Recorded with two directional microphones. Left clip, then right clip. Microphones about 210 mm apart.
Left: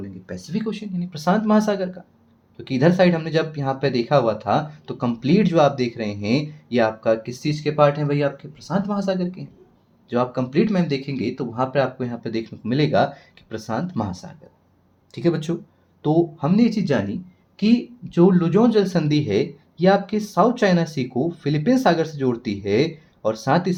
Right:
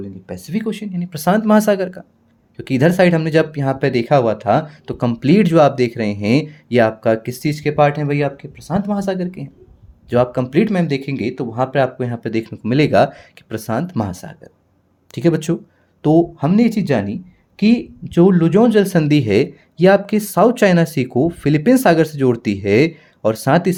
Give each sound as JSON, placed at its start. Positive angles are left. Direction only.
{"t": 0.3, "sound": "speech", "side_deg": -55}